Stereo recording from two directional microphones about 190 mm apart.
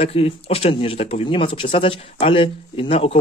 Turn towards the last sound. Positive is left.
turn(degrees=30)  # may be behind; listen again after turning